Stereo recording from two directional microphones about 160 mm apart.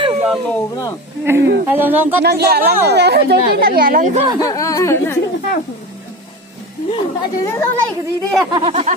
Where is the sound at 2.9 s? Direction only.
90° right; by 4.2 s 55° right (ahead or behind).